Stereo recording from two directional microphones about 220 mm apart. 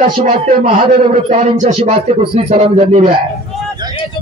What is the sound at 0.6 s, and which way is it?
Speech, 30° right (ahead or behind).